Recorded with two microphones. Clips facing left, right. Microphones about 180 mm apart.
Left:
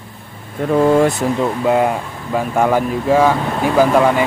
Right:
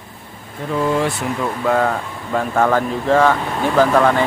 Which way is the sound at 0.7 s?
50° left (ahead or behind).